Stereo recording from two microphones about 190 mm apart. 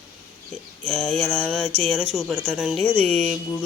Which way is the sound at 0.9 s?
5° left (ahead or behind).